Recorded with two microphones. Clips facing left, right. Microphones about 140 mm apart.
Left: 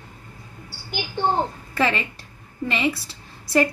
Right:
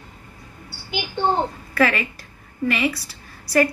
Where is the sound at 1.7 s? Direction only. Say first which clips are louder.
Right 2 dB; 25° left (ahead or behind).